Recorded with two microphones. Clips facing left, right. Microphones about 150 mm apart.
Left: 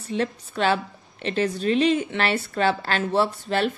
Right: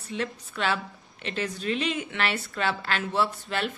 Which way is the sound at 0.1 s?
30° left (ahead or behind).